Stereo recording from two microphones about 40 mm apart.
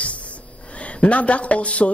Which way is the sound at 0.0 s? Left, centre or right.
Left.